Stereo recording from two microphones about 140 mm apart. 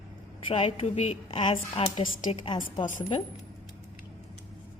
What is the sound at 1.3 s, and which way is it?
A woman's voice, 35° left (ahead or behind).